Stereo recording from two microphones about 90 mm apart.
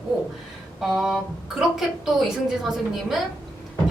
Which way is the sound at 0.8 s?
Centre (ahead or behind).